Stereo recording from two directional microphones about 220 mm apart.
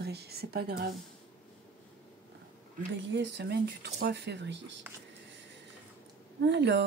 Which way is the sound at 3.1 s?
50° right (ahead or behind).